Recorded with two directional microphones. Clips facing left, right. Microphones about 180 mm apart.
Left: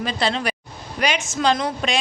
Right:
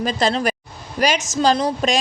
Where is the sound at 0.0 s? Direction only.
45° right (ahead or behind).